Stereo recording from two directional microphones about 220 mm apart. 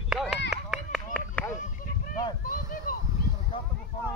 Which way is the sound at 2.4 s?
40° left (ahead or behind).